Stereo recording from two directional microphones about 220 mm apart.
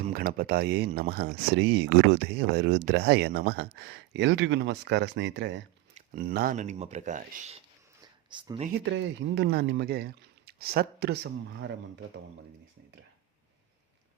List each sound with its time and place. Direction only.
0.1 s speech: 40° right (ahead or behind)
5.9 s speech: 40° right (ahead or behind)
8.3 s speech: 20° right (ahead or behind)
8.8 s speech: 55° right (ahead or behind)